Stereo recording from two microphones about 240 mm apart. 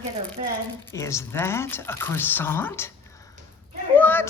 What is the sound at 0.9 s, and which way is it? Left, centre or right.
Speech, centre.